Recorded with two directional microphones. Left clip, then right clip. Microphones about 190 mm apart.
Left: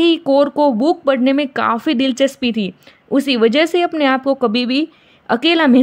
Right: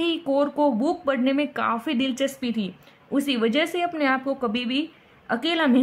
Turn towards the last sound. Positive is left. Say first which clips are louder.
# left 9 dB
turn(degrees=45)  # may be behind; listen again after turning